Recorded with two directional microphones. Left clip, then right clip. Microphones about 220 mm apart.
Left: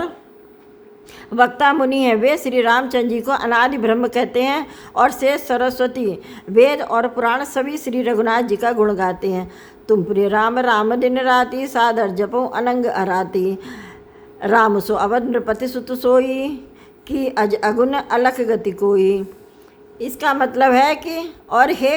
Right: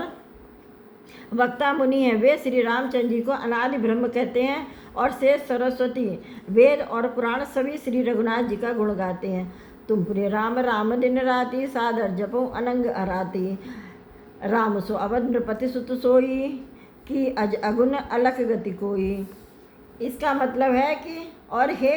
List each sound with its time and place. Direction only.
1.4 s a woman's voice: 30° left (ahead or behind)